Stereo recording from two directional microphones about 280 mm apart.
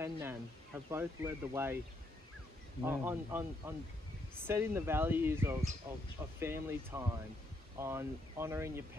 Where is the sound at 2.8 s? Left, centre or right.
Centre.